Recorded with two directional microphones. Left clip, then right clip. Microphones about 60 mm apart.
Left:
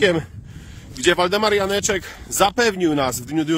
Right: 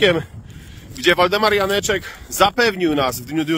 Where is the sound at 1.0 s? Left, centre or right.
Left.